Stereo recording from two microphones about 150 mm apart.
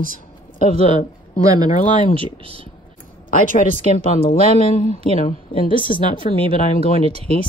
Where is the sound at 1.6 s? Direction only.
60° left (ahead or behind).